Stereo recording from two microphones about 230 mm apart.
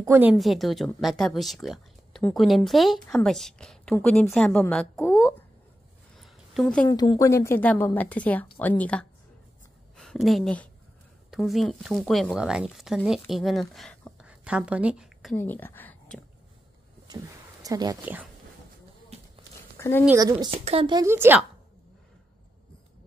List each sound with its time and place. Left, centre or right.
0.0 s a woman's voice: centre
6.1 s a sound: centre
6.9 s a woman's voice: centre
15.3 s a woman's voice: centre
17.6 s a woman's voice: centre
19.8 s speech: centre
20.1 s a woman's voice: centre